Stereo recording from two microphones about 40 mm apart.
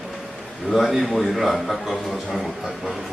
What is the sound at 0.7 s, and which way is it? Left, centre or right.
A man's voice, centre.